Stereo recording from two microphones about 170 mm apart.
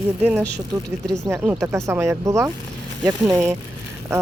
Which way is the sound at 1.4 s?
5° right (ahead or behind).